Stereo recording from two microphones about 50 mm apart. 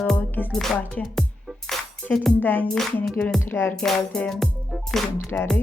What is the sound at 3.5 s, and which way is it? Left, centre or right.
Speech, left.